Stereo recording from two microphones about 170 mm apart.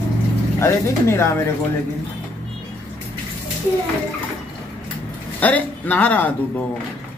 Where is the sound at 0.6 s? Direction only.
15° left (ahead or behind).